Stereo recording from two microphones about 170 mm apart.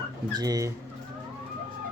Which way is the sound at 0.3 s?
20° right (ahead or behind).